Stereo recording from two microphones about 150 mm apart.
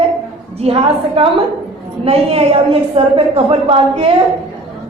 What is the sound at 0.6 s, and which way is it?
A woman's voice, 40° right (ahead or behind).